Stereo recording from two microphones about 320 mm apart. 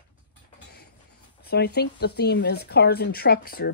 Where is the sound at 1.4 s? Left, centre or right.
Left.